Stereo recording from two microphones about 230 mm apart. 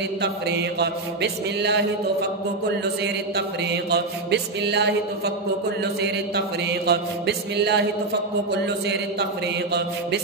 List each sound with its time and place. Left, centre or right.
0.2 s mantra: right
3.3 s mantra: right